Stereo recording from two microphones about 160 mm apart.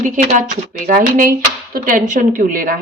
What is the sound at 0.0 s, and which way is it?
A woman's voice, 50° right (ahead or behind).